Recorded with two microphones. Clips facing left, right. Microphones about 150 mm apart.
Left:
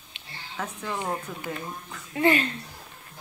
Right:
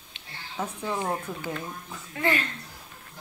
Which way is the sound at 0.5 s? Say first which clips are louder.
Right 2 dB; 10° right (ahead or behind).